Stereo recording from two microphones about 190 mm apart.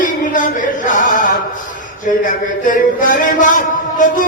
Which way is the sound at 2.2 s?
45° left (ahead or behind).